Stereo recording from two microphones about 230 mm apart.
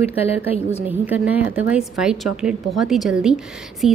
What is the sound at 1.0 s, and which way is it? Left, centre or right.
A woman's voice, centre.